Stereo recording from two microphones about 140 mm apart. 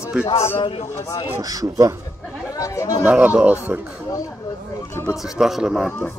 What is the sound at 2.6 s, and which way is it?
Speech, 25° left (ahead or behind).